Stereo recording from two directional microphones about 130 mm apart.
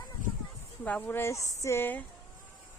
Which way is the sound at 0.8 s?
10° left (ahead or behind).